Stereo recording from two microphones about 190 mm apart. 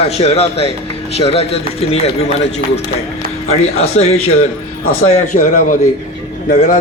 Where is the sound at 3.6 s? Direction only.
35° left (ahead or behind).